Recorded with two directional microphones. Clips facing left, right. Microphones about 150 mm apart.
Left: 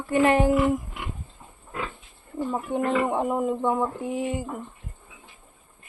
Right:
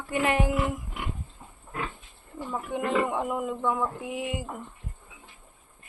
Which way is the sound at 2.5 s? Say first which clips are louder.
Left 3 dB; 35° left (ahead or behind).